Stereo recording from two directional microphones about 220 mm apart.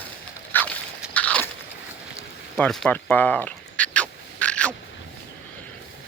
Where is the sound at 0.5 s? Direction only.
10° left (ahead or behind).